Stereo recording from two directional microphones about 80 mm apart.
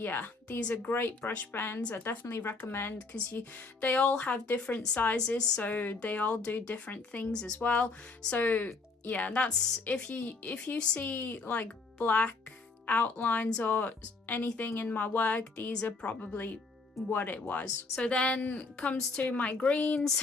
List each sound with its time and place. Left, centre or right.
0.0 s speech: left